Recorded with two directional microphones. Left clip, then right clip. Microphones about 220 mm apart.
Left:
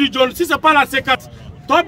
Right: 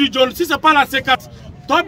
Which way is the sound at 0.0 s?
Centre (ahead or behind).